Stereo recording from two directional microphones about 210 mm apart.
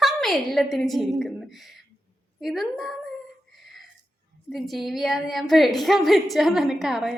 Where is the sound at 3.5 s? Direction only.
Centre (ahead or behind).